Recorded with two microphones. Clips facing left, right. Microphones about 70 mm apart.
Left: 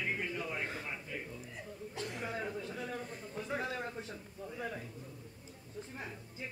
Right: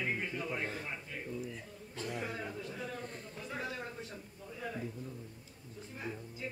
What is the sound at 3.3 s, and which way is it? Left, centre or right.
Speech, left.